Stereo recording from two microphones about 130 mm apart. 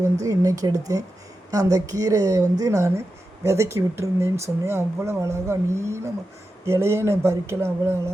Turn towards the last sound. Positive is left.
turn(degrees=-20)  # may be behind; listen again after turning